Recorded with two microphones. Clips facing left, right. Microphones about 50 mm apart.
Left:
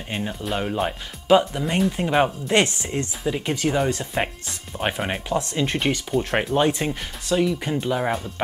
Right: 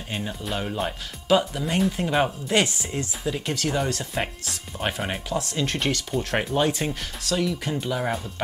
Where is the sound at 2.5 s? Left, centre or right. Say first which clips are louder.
Left 2 dB; left.